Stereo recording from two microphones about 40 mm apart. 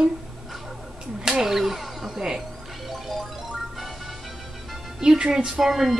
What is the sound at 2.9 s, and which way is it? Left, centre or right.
Music, centre.